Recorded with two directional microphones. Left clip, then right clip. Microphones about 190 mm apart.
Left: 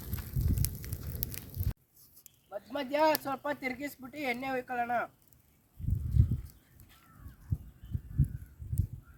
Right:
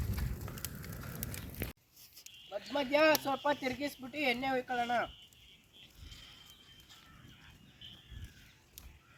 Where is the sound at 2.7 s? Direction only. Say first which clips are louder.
Even; centre (ahead or behind).